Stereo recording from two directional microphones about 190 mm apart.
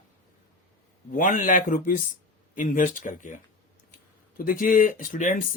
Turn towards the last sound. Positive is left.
turn(degrees=45)  # may be behind; listen again after turning